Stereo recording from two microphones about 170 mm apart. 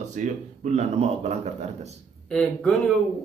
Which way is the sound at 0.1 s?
45° right (ahead or behind).